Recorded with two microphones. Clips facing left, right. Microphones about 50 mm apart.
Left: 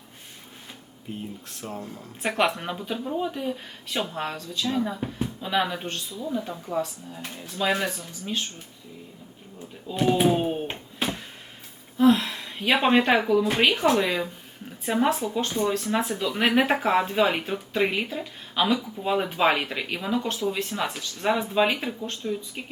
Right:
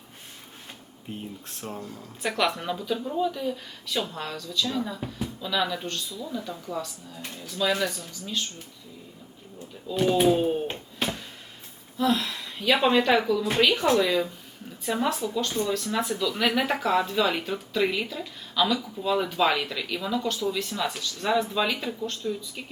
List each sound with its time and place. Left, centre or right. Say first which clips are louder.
1.8 s speech: left 1 dB; left
9.9 s speech: even; centre
11.9 s a sound: left 5 dB; left
13.2 s speech: left 2 dB; left